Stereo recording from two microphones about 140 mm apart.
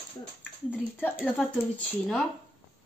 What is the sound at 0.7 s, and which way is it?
Speech, 15° left (ahead or behind).